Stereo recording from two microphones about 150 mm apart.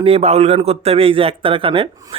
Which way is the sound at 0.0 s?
45° right (ahead or behind).